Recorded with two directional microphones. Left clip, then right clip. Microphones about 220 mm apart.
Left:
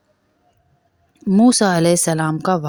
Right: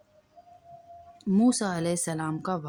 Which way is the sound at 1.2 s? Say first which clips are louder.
Left 11 dB; 30° left (ahead or behind).